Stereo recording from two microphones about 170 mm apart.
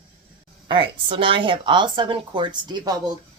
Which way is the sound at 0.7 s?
30° right (ahead or behind).